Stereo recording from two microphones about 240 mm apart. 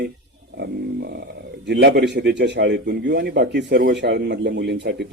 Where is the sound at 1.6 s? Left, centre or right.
Right.